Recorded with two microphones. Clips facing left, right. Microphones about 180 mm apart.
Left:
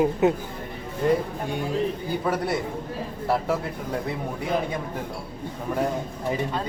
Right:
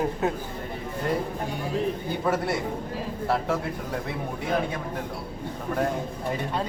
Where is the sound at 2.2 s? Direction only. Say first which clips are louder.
Right 1 dB; centre (ahead or behind).